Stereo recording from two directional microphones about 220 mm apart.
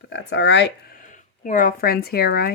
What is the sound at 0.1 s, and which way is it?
Speech, 55° left (ahead or behind).